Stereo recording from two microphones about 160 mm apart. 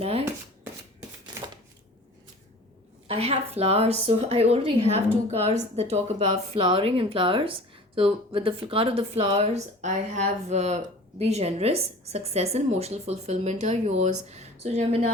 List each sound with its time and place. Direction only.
0.0 s shuffling cards: 40° right (ahead or behind)
3.1 s a woman's voice: 40° right (ahead or behind)